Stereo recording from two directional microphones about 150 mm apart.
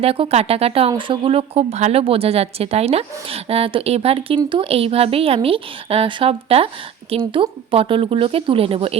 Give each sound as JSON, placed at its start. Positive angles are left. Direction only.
{"t": 0.0, "sound": "speech", "side_deg": -40}